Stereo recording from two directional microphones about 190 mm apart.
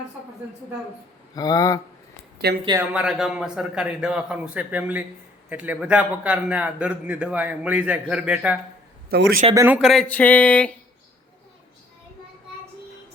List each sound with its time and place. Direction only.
1.4 s speech: 20° left (ahead or behind)
2.4 s speech: 60° right (ahead or behind)
2.9 s a man's voice: 5° right (ahead or behind)
9.0 s a man's voice: 55° right (ahead or behind)
9.6 s a man's voice: 10° right (ahead or behind)